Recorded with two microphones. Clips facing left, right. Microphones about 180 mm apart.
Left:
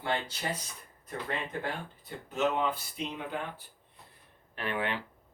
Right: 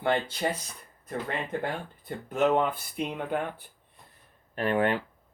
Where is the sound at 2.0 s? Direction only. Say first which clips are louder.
Right 5 dB; 50° right (ahead or behind).